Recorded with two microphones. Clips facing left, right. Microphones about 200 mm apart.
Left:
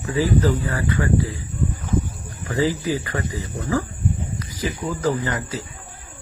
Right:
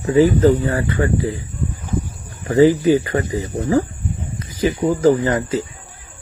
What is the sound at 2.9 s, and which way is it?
Speech, 25° right (ahead or behind).